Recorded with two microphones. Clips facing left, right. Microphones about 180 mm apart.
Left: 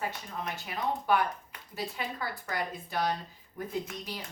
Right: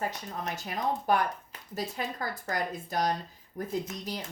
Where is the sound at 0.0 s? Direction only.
40° right (ahead or behind).